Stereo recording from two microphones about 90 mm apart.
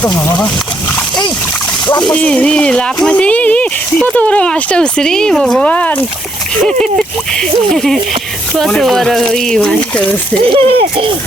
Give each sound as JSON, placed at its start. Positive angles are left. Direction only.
{"t": 2.0, "sound": "speech", "side_deg": 10}
{"t": 7.7, "sound": "speech", "side_deg": 5}
{"t": 10.4, "sound": "speech", "side_deg": -90}